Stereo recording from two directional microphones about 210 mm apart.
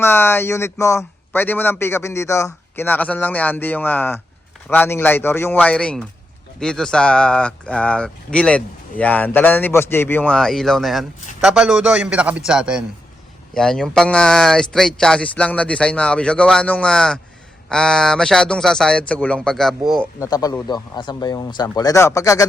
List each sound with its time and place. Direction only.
0.0 s a man's voice: 10° left (ahead or behind)
20.1 s a man's voice: 15° left (ahead or behind)